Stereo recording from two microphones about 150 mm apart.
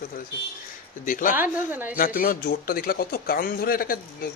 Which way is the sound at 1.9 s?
70° left (ahead or behind).